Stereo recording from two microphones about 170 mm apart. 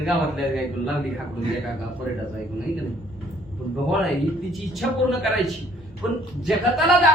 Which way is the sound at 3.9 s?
Centre (ahead or behind).